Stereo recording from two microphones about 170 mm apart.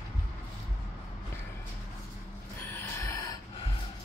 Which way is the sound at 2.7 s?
15° left (ahead or behind).